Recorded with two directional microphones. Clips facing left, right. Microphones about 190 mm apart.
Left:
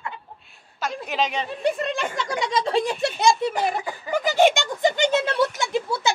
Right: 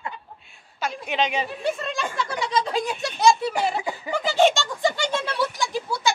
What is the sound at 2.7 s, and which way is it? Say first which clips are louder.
Speech: left 4 dB; 30° left (ahead or behind).